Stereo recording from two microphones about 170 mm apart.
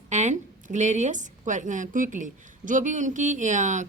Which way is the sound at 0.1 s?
45° right (ahead or behind).